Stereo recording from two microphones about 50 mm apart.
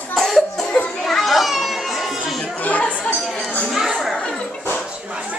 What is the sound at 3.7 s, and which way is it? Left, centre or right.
Chatter, centre.